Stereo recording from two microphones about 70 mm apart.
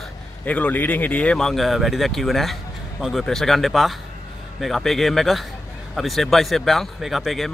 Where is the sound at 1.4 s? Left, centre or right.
Centre.